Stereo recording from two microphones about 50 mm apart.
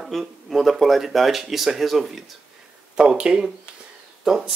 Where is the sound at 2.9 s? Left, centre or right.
Centre.